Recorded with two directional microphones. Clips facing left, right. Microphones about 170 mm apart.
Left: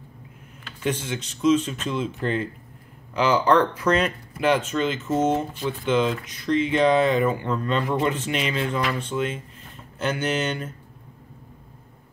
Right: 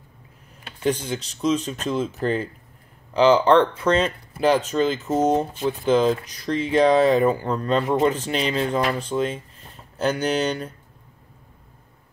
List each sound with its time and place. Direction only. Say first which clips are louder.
0.8 s speech: right 3 dB; 35° right (ahead or behind)